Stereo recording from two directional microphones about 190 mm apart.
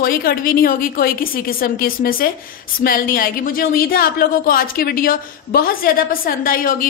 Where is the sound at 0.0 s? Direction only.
50° left (ahead or behind).